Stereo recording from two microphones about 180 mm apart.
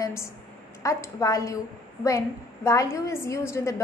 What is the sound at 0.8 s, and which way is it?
A woman's voice, 20° left (ahead or behind).